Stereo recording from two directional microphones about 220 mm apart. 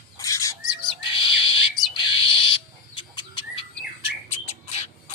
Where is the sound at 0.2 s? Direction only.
15° left (ahead or behind).